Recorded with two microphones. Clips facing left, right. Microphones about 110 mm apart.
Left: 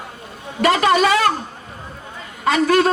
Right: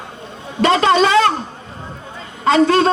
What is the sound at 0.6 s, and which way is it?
Speech, 25° right (ahead or behind).